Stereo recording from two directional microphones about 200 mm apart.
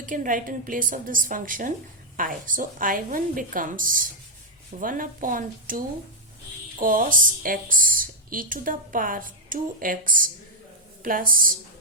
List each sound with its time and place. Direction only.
0.0 s a woman's voice: 40° right (ahead or behind)